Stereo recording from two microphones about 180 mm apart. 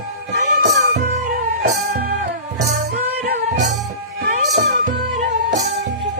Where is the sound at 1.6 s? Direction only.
60° right (ahead or behind).